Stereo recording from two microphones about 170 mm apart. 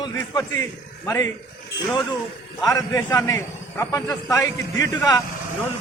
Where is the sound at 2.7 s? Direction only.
20° left (ahead or behind).